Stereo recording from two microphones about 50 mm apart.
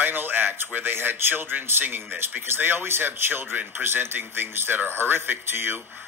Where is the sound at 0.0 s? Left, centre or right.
Right.